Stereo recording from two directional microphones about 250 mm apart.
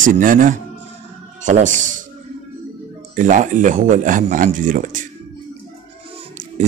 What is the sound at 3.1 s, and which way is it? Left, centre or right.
Speech, right.